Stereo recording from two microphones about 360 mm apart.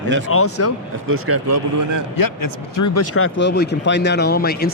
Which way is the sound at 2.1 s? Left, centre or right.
Left.